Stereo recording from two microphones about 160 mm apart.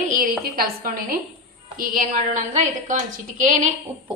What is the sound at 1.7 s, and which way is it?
A woman's voice, 60° right (ahead or behind).